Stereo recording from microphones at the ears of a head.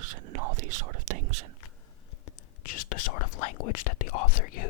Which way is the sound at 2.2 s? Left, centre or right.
Left.